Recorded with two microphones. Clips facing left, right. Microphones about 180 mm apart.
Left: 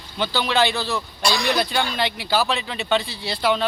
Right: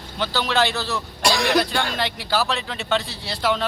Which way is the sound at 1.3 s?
70° right (ahead or behind).